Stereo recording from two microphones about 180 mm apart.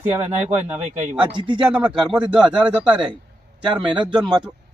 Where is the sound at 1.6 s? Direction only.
5° right (ahead or behind).